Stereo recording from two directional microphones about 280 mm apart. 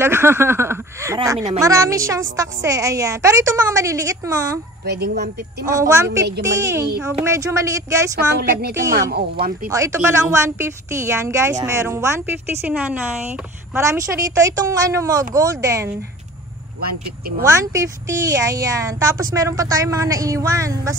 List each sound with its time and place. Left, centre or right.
0.0 s speech: centre
4.8 s speech: right
5.1 s speech: right
5.7 s speech: centre
8.4 s speech: right
9.7 s speech: centre
17.4 s speech: centre